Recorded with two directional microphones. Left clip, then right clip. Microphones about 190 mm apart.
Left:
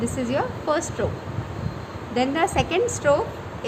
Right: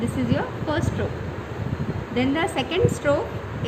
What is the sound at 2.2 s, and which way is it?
A woman's voice, 30° left (ahead or behind).